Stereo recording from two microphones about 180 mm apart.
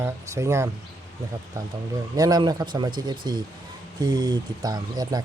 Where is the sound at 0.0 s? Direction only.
15° right (ahead or behind).